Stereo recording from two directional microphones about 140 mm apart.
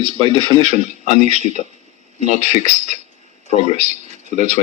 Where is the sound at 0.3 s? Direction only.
45° left (ahead or behind).